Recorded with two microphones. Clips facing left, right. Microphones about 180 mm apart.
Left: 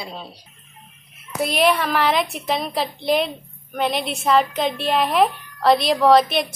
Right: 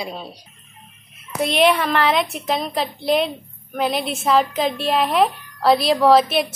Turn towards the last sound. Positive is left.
turn(degrees=0)  # may be behind; listen again after turning